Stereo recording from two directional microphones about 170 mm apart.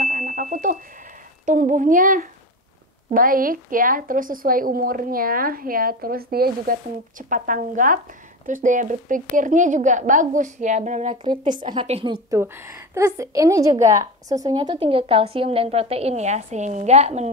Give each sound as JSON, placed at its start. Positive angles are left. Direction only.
{"t": 0.0, "sound": "bicycle bell", "side_deg": -45}
{"t": 1.4, "sound": "a woman's voice", "side_deg": -50}
{"t": 12.4, "sound": "a woman's voice", "side_deg": -15}